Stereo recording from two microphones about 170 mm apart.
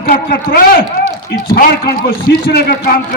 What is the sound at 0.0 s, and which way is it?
A man's voice, 55° left (ahead or behind).